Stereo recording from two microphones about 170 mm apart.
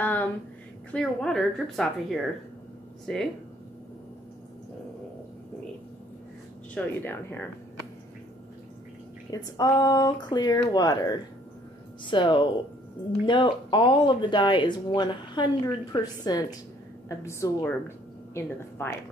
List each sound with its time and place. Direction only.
0.0 s a sound: 10° left (ahead or behind)
0.9 s a woman's voice: 5° left (ahead or behind)
3.1 s a woman's voice: 5° left (ahead or behind)
6.7 s speech: 10° left (ahead or behind)
9.3 s a woman's voice: 20° left (ahead or behind)